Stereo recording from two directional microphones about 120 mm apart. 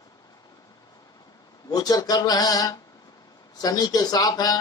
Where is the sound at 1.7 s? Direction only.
35° left (ahead or behind).